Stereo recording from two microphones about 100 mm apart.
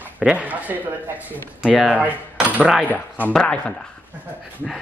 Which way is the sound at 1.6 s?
10° left (ahead or behind).